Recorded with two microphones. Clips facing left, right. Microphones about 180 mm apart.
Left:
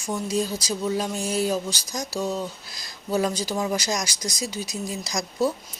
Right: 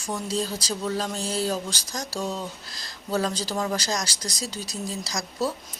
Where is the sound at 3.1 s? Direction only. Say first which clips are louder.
Left 2 dB; 10° left (ahead or behind).